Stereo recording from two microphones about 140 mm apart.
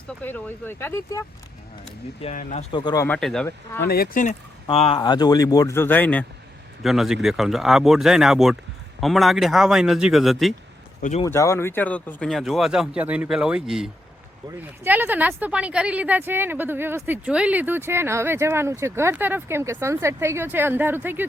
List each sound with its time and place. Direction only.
0.2 s speech: 10° left (ahead or behind)
2.2 s speech: 65° left (ahead or behind)
2.7 s speech: 30° left (ahead or behind)
3.2 s speech: 5° left (ahead or behind)
3.8 s speech: 90° left; by 4.4 s 75° left (ahead or behind)
4.7 s speech: 45° left (ahead or behind)
4.9 s speech: 30° left (ahead or behind); by 6.2 s 10° left (ahead or behind)
6.8 s speech: centre (ahead or behind)
11.3 s speech: 20° left (ahead or behind); by 21.2 s 15° right (ahead or behind)